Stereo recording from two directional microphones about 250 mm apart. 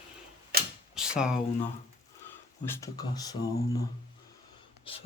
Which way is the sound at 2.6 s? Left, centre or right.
Centre.